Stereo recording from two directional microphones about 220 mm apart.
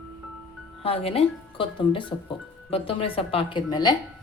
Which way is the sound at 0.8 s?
25° left (ahead or behind).